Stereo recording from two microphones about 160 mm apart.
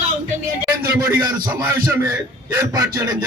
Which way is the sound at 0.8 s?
20° right (ahead or behind).